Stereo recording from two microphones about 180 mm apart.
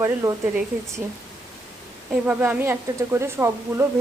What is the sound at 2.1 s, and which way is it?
A woman's voice, 10° right (ahead or behind).